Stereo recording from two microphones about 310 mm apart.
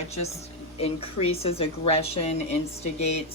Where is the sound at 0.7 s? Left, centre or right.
Centre.